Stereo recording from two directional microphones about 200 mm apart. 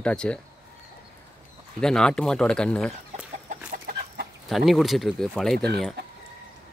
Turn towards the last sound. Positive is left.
turn(degrees=0)  # may be behind; listen again after turning